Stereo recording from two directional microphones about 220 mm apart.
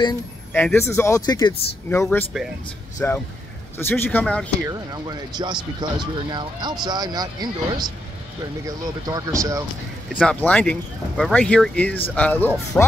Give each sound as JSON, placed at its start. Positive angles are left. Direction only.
{"t": 0.5, "sound": "speech", "side_deg": 5}
{"t": 4.6, "sound": "speech", "side_deg": -15}
{"t": 10.1, "sound": "speech", "side_deg": 5}